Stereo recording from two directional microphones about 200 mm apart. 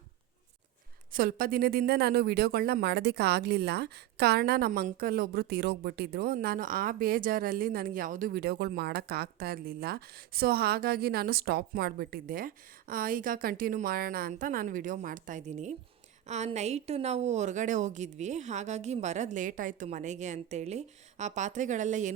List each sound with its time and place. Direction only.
1.1 s a woman's voice: 45° right (ahead or behind)